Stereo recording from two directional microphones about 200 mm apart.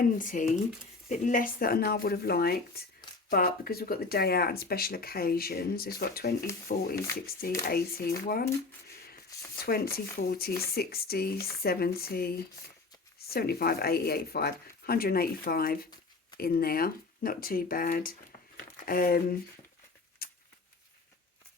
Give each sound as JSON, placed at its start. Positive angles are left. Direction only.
{"t": 0.0, "sound": "speech", "side_deg": 40}
{"t": 9.6, "sound": "speech", "side_deg": 50}
{"t": 13.3, "sound": "speech", "side_deg": 50}
{"t": 20.2, "sound": "a sound", "side_deg": 50}